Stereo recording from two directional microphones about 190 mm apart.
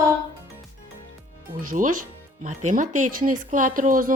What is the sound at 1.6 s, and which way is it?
Speech, 45° right (ahead or behind).